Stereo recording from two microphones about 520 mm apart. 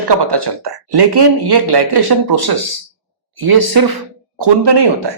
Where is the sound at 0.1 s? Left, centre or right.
Right.